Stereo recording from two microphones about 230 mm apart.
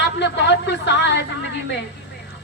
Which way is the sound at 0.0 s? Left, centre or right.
Left.